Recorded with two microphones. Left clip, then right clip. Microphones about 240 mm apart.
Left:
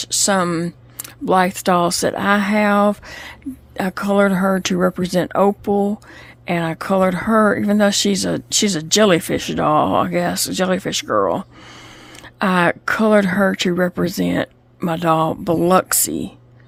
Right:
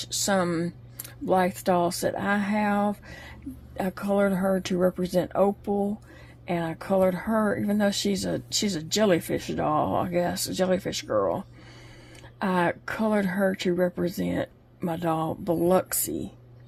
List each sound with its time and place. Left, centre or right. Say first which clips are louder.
0.0 s speech: left 8 dB; left